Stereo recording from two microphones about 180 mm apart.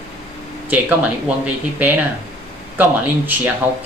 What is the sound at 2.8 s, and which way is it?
Speech, 10° right (ahead or behind).